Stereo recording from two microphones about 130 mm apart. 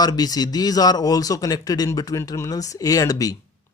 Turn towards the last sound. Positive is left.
turn(degrees=25)  # may be behind; listen again after turning